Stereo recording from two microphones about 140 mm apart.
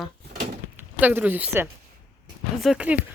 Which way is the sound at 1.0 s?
15° right (ahead or behind).